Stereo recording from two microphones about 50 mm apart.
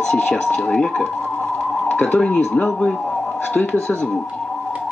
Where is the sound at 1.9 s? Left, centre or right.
Left.